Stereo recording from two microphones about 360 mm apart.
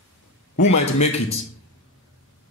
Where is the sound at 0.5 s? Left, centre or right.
Centre.